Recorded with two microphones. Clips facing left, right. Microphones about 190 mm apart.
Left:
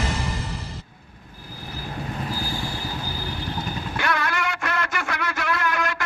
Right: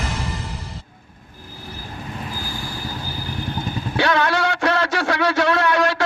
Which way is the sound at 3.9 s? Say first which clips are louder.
Right 7 dB; 80° right.